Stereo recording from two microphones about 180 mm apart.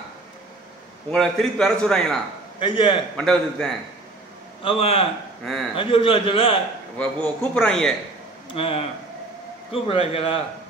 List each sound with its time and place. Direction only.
1.1 s a man's voice: centre (ahead or behind)
2.6 s a man's voice: 30° left (ahead or behind)
3.2 s a man's voice: 5° left (ahead or behind)
4.6 s a man's voice: 30° left (ahead or behind)
5.4 s a man's voice: centre (ahead or behind)
5.8 s a man's voice: 30° left (ahead or behind)
7.0 s a man's voice: 5° left (ahead or behind)
8.5 s a man's voice: 30° left (ahead or behind)